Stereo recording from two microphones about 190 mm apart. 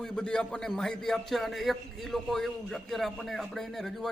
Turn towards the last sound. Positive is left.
turn(degrees=0)  # may be behind; listen again after turning